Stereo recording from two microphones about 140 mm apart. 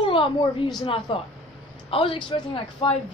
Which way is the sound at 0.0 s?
40° left (ahead or behind).